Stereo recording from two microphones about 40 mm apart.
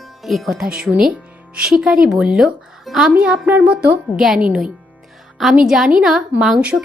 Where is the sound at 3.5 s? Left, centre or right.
Right.